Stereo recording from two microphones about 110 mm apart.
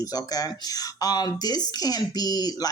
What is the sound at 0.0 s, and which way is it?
Speech, 35° left (ahead or behind).